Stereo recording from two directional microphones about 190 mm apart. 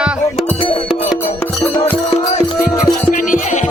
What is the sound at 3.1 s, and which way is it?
Music, 45° left (ahead or behind).